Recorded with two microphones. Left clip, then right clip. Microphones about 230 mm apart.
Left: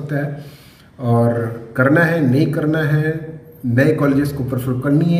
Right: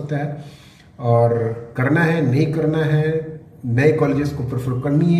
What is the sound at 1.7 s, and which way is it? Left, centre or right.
A man's voice, centre.